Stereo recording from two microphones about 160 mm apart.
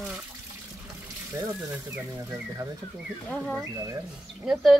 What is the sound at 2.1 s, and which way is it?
Speech, 20° right (ahead or behind).